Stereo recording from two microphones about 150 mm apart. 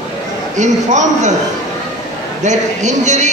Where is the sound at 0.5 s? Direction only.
55° right (ahead or behind).